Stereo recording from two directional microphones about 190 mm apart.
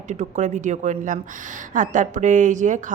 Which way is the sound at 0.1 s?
40° right (ahead or behind).